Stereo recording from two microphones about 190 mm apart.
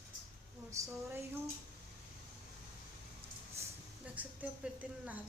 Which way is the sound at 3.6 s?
15° right (ahead or behind).